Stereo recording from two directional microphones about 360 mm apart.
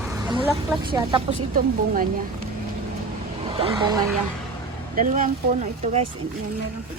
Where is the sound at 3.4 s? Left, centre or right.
Centre.